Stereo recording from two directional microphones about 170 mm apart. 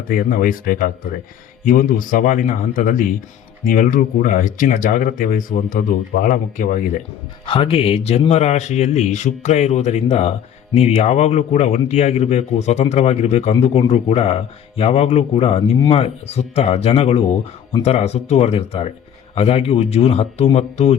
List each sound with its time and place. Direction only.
0.1 s speech: 55° left (ahead or behind)
7.4 s a man's voice: 35° left (ahead or behind)